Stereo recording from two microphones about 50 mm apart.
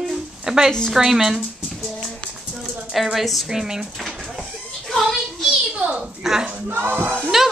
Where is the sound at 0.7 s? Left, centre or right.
Centre.